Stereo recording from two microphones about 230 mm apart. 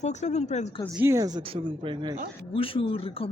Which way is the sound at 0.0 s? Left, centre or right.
Left.